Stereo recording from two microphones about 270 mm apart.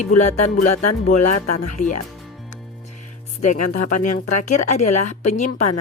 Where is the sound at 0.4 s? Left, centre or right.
Left.